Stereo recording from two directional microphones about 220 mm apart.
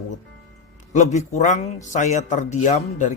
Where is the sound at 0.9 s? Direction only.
30° left (ahead or behind).